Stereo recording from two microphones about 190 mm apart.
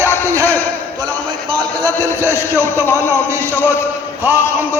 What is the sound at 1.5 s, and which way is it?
A man's voice, 20° right (ahead or behind).